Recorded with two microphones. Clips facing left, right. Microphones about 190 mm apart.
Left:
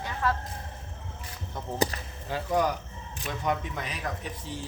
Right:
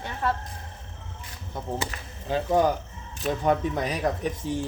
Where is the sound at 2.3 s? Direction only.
25° right (ahead or behind).